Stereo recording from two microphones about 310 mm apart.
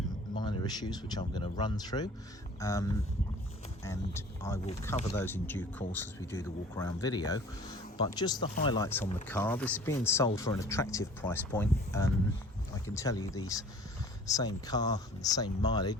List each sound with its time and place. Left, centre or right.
0.3 s speech: centre